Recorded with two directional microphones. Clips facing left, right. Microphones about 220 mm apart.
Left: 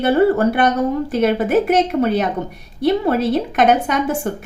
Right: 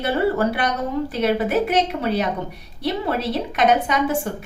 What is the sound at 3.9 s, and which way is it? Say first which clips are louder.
Speech: left 2 dB; 50° left (ahead or behind).